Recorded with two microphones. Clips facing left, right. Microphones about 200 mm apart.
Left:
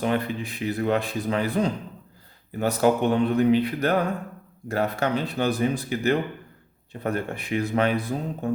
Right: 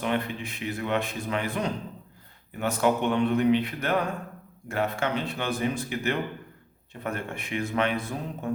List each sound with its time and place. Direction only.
0.0 s speech: 35° left (ahead or behind)